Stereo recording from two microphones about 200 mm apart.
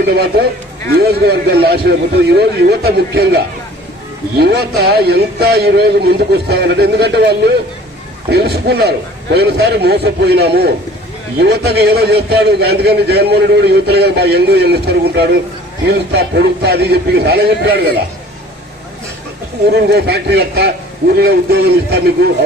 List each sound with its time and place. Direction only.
0.0 s a man's voice: 55° right (ahead or behind)
4.4 s a man's voice: 55° right (ahead or behind)
19.7 s a man's voice: 50° right (ahead or behind)